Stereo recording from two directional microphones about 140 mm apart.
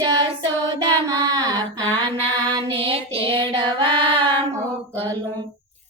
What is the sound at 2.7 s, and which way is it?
Child singing, 40° right (ahead or behind).